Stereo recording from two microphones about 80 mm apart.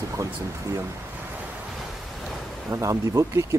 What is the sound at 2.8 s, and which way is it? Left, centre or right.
Speech, right.